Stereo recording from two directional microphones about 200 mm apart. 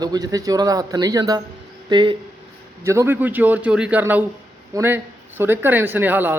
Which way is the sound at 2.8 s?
15° right (ahead or behind).